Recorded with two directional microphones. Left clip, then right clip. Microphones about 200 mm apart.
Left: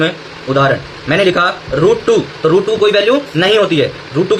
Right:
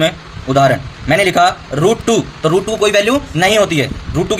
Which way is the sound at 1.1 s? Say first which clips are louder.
Right 1 dB; 55° right (ahead or behind).